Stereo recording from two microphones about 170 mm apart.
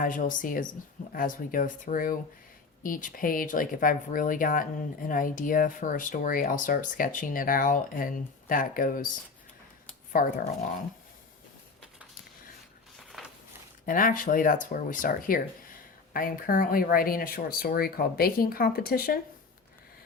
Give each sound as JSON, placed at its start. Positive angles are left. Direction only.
{"t": 0.0, "sound": "speech", "side_deg": 55}
{"t": 10.1, "sound": "speech", "side_deg": 55}
{"t": 13.2, "sound": "a sound", "side_deg": 0}
{"t": 13.8, "sound": "speech", "side_deg": 55}